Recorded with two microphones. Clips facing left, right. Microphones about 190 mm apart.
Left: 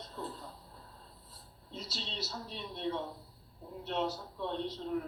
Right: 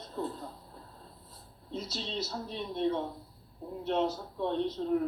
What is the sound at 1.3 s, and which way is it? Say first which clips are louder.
A woman's voice: right 9 dB; 50° right (ahead or behind).